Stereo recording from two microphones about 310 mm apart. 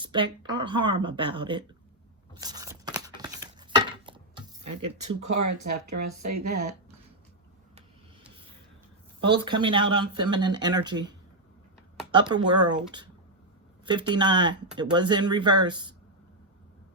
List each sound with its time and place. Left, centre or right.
0.0 s speech: centre
2.4 s a sound: centre
4.6 s speech: right
9.2 s speech: centre
12.1 s speech: centre